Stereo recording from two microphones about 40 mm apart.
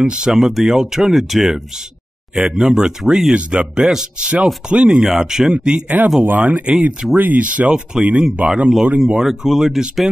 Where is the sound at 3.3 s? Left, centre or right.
Right.